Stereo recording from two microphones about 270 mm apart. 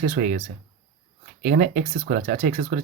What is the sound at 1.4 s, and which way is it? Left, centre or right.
Speech, right.